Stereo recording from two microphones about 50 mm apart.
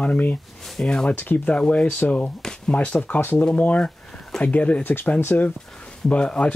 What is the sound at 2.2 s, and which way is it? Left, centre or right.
Speech, left.